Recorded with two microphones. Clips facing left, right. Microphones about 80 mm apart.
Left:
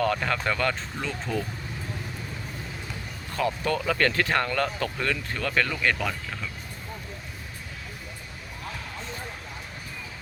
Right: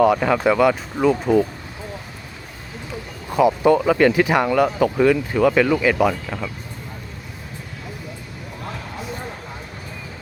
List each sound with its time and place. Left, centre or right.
0.1 s speech: centre
3.3 s speech: centre